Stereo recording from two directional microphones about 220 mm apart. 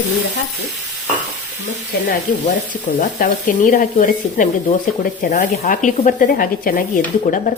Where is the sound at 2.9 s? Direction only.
35° left (ahead or behind).